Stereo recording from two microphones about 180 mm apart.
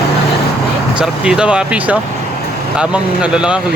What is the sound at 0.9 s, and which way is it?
Speech, 5° right (ahead or behind).